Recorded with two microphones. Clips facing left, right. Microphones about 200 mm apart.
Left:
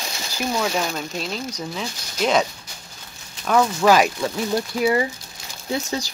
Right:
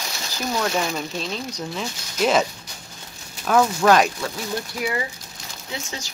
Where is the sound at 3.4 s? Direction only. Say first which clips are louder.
Even; centre (ahead or behind).